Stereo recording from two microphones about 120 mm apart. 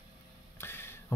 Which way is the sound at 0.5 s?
20° left (ahead or behind).